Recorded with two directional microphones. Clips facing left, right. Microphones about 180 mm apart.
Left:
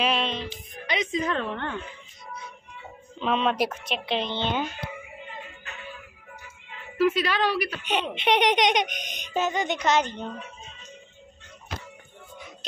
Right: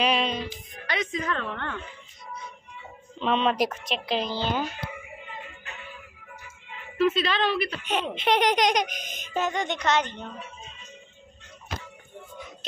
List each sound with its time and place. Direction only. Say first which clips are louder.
0.0 s music: right 1 dB; centre (ahead or behind)
0.8 s a woman's voice: left 2 dB; 20° left (ahead or behind)
3.2 s a child's voice: right 1 dB; centre (ahead or behind)
7.0 s a woman's voice: left 1 dB; 10° left (ahead or behind)
7.8 s a child's voice: left 1 dB; centre (ahead or behind)